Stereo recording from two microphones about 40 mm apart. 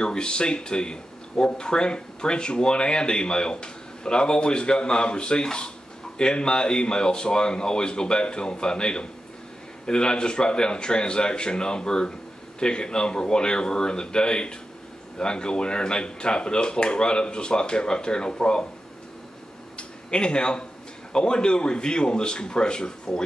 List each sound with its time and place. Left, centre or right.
0.0 s speech: left
19.8 s a sound: left
21.1 s speech: left